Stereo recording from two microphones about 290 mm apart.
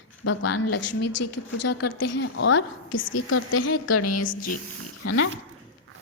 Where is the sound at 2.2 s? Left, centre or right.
Left.